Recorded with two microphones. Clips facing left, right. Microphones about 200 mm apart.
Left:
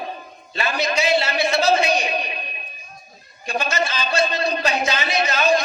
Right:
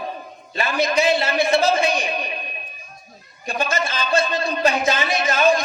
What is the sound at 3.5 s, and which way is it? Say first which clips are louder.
A man's voice: even; 50° right (ahead or behind).